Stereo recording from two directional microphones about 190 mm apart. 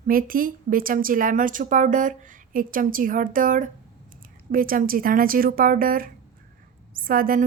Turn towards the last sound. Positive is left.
turn(degrees=-50)  # may be behind; listen again after turning